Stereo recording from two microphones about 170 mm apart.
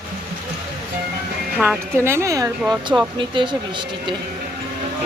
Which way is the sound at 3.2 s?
30° right (ahead or behind).